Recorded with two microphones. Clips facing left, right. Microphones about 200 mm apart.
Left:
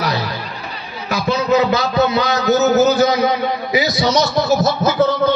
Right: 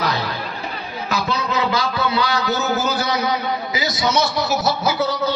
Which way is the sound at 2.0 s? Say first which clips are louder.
Left 5 dB; 45° left (ahead or behind).